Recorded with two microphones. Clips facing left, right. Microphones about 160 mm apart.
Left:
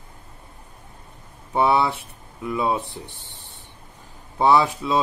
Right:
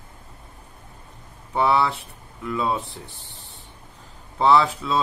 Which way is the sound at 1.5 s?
20° left (ahead or behind).